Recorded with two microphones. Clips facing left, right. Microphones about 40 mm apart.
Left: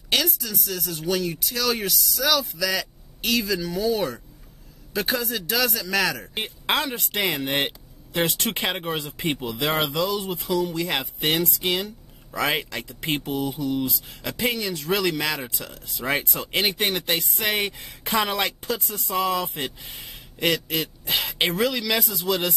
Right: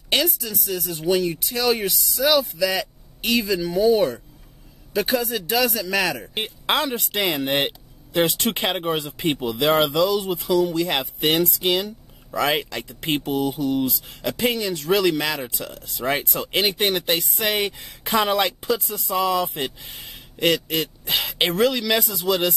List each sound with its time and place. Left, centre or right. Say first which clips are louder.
0.1 s speech: right 2 dB; centre
10.9 s speech: right 3 dB; centre
12.4 s speech: right 3 dB; centre
13.2 s mantra: right 4 dB; right
13.8 s speech: right 4 dB; centre
16.7 s speech: right 3 dB; centre
17.2 s speech: right 2 dB; centre